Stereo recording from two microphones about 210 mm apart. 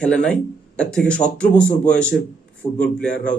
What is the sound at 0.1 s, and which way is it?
Speech, 5° left (ahead or behind).